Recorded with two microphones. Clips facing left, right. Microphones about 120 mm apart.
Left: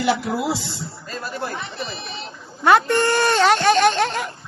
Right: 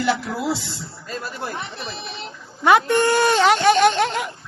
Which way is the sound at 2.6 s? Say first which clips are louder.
Even; 10° right (ahead or behind).